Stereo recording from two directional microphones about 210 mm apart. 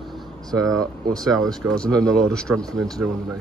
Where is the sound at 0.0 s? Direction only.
Centre (ahead or behind).